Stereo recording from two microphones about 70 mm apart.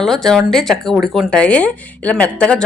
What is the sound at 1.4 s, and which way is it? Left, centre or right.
Speech, centre.